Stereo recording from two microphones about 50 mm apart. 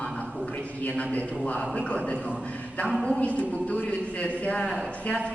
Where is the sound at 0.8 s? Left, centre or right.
Left.